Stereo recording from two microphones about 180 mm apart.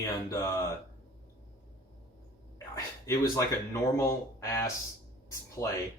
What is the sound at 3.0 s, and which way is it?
Speech, 15° left (ahead or behind).